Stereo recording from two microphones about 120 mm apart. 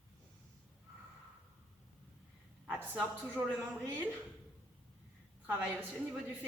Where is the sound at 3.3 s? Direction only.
20° right (ahead or behind).